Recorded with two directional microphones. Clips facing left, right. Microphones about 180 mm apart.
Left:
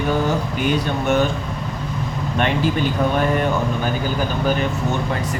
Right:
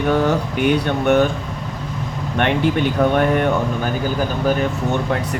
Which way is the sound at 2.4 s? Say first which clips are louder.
Right 2 dB; 65° right (ahead or behind).